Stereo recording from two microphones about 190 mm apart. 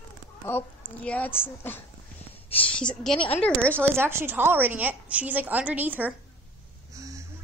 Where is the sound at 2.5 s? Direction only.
5° left (ahead or behind).